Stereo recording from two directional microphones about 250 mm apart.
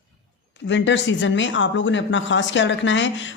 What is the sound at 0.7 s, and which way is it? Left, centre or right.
Speech, left.